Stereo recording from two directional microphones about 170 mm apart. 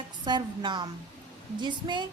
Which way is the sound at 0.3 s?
25° right (ahead or behind).